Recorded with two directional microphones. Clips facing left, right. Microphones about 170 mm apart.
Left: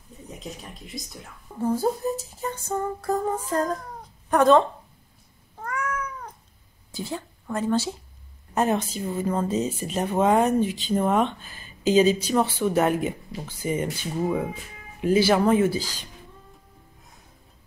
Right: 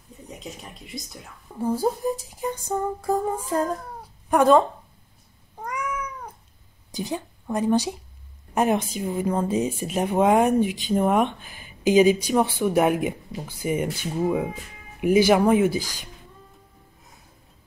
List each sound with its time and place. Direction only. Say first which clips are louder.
0.3 s speech: even; centre (ahead or behind)
1.6 s speech: even; 10° right (ahead or behind)
5.6 s cat: even; 15° right (ahead or behind)
6.9 s speech: right 3 dB; 15° right (ahead or behind)